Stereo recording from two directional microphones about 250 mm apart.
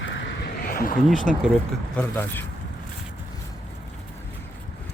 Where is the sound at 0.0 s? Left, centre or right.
Left.